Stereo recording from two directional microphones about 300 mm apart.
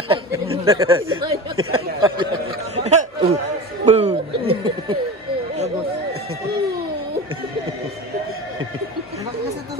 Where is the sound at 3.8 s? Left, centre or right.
Right.